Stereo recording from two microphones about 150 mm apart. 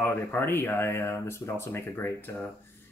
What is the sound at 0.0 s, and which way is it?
Speech, 15° left (ahead or behind).